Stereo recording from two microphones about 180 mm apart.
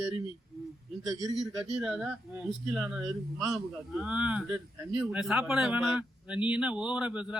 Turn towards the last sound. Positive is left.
turn(degrees=-5)  # may be behind; listen again after turning